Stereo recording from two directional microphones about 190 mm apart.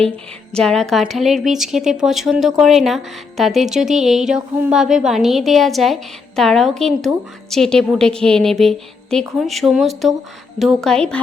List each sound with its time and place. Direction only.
0.5 s a woman's voice: 5° left (ahead or behind)